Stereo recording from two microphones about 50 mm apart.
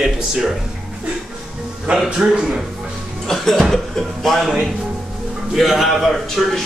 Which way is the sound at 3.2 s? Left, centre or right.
Centre.